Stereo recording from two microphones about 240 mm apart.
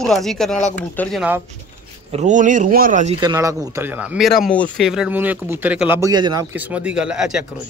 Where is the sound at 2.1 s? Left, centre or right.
Right.